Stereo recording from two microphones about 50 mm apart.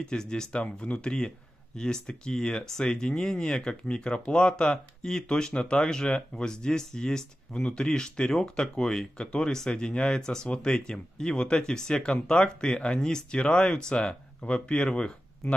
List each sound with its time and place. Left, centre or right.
0.0 s speech: centre